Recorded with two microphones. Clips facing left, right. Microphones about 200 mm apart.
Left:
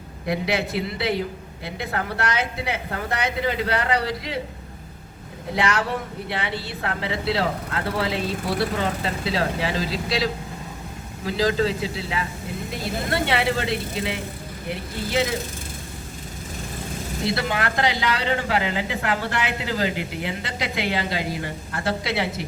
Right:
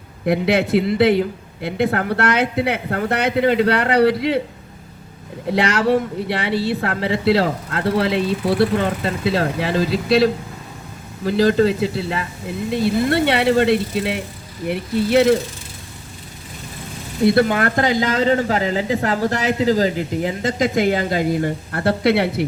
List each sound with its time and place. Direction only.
0.3 s speech: 60° right (ahead or behind)
6.2 s speech: 65° right (ahead or behind)
11.3 s speech: 60° right (ahead or behind)
17.2 s speech: 50° right (ahead or behind)